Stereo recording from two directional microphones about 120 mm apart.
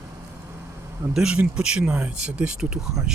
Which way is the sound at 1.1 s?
5° right (ahead or behind).